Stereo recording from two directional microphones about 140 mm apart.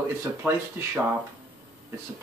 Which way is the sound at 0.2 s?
20° right (ahead or behind).